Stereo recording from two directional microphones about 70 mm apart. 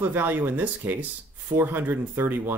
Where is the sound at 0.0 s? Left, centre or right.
Right.